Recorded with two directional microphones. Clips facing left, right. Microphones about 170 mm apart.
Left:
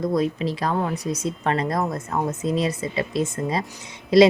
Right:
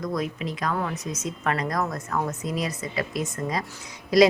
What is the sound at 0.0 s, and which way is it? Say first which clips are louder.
A woman's voice: left 6 dB; 30° left (ahead or behind).